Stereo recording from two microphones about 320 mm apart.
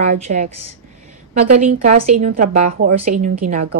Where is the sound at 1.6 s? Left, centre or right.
Right.